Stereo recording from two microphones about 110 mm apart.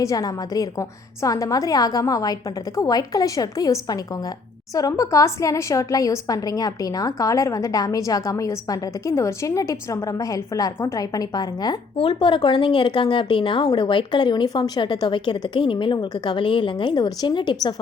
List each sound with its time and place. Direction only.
0.0 s a woman's voice: 30° left (ahead or behind)
11.9 s speech: 50° left (ahead or behind)